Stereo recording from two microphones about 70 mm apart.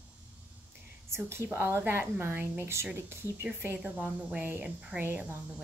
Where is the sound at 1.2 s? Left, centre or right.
Right.